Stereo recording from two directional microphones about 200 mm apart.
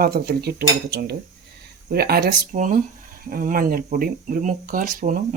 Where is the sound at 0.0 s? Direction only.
50° right (ahead or behind).